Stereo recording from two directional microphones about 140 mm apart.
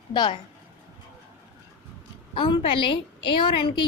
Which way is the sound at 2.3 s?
35° left (ahead or behind).